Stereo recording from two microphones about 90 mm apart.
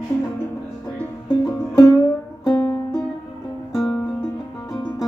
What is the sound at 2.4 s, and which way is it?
Music, 25° left (ahead or behind).